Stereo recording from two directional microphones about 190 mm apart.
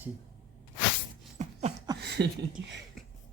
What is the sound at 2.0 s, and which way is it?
Speech, 60° right (ahead or behind).